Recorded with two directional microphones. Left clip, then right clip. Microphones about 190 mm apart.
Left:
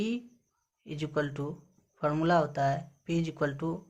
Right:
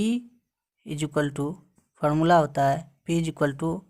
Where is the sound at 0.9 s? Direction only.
45° right (ahead or behind).